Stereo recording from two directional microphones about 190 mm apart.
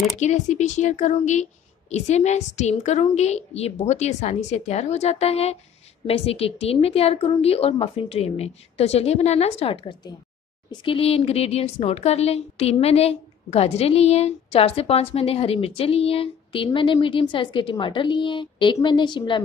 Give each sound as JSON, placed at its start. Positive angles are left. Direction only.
{"t": 0.2, "sound": "speech", "side_deg": 40}